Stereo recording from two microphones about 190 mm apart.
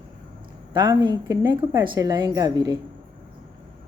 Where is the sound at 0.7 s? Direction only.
20° right (ahead or behind).